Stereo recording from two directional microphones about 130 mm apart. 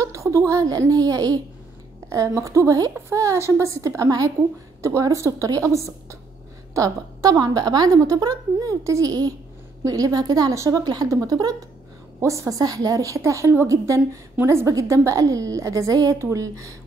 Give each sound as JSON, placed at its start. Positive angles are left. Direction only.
{"t": 0.0, "sound": "a woman's voice", "side_deg": -25}